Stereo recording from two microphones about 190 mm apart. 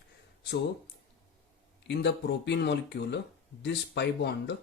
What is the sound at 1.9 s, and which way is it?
Speech, 65° left (ahead or behind).